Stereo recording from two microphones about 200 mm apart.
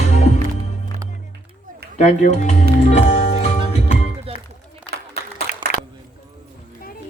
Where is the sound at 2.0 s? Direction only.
35° left (ahead or behind).